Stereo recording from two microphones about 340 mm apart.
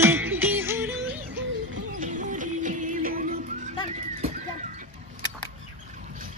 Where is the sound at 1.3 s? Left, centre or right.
Right.